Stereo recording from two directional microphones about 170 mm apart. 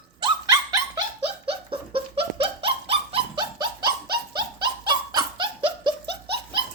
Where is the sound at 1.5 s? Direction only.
35° right (ahead or behind).